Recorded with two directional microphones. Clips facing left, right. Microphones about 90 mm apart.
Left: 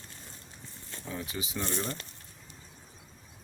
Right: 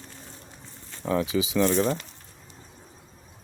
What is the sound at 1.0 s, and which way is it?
Speech, 85° right.